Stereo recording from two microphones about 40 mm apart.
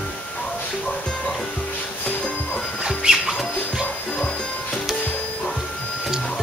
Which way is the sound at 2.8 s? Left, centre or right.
Centre.